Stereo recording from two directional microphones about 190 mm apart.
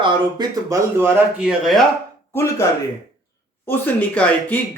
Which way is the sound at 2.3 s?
15° left (ahead or behind).